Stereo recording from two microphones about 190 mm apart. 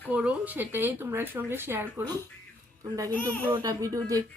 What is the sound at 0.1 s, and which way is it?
Speech, 5° right (ahead or behind).